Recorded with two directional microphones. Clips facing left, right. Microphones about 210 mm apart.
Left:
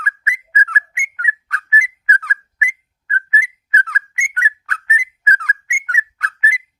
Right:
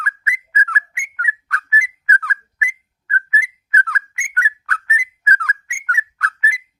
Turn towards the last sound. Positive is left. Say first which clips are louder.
# even
turn(degrees=20)  # may be behind; listen again after turning